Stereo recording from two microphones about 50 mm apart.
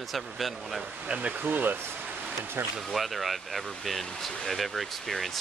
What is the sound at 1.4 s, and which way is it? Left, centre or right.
Speech, right.